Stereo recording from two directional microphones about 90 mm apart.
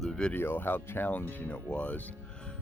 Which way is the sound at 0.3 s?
25° left (ahead or behind).